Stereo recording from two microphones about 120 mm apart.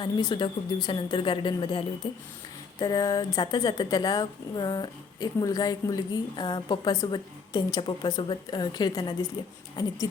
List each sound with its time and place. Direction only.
0.0 s speech: 40° left (ahead or behind)
2.8 s a sound: 25° left (ahead or behind)
3.4 s a woman's voice: 40° left (ahead or behind)